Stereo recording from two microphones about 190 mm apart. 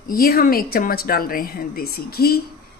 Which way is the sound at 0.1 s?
50° left (ahead or behind).